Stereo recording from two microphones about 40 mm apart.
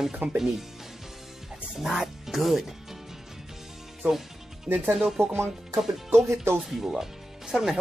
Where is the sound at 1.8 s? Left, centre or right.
Centre.